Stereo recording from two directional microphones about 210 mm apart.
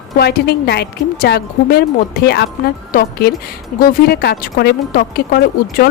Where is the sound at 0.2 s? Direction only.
50° left (ahead or behind).